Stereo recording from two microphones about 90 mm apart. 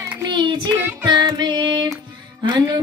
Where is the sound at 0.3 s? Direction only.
60° right (ahead or behind).